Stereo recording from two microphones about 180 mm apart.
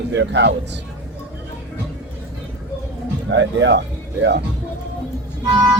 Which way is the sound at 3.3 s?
85° right.